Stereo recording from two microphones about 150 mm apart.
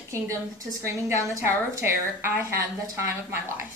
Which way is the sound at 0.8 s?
20° right (ahead or behind).